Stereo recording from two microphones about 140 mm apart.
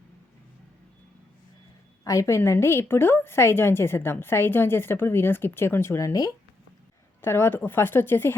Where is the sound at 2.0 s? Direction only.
20° left (ahead or behind).